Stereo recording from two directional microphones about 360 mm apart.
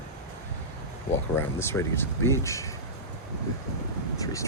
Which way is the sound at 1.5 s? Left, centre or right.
Centre.